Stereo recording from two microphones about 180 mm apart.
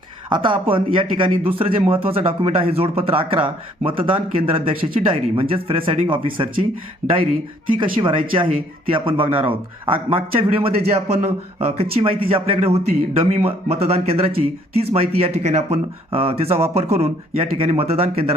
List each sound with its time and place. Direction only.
0.3 s a man's voice: 25° right (ahead or behind)
7.8 s a man's voice: 30° right (ahead or behind)